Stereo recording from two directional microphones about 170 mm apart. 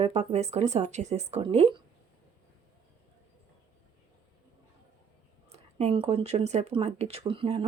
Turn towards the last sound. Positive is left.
turn(degrees=-30)  # may be behind; listen again after turning